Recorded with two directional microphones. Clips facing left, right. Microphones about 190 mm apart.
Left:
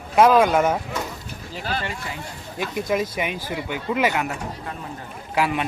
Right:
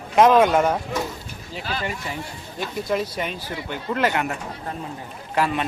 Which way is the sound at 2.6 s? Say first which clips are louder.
Left 1 dB; 10° left (ahead or behind).